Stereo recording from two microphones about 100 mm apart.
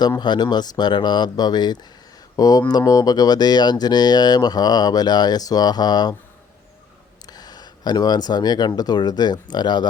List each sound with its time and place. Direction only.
0.2 s speech: 45° left (ahead or behind)
7.3 s speech: 40° left (ahead or behind)